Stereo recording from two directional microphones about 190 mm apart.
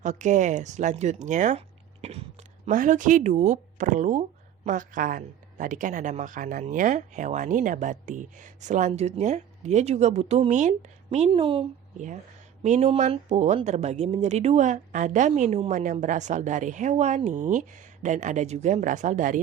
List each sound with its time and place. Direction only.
0.0 s speech: 40° right (ahead or behind)